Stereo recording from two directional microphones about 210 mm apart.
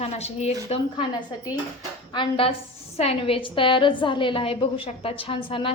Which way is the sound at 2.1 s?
25° left (ahead or behind).